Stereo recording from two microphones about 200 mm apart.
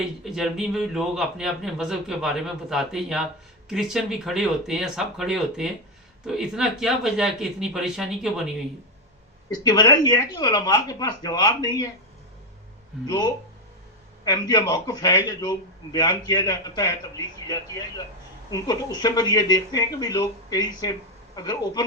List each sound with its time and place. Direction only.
0.3 s a man's voice: centre (ahead or behind)
9.6 s a man's voice: 20° left (ahead or behind)
13.1 s a man's voice: 20° left (ahead or behind)